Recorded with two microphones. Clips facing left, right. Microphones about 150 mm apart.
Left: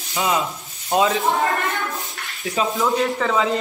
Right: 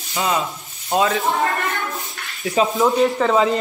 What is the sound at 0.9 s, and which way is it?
Speech, 20° left (ahead or behind).